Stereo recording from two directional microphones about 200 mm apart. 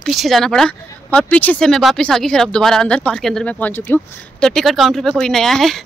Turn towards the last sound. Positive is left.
turn(degrees=0)  # may be behind; listen again after turning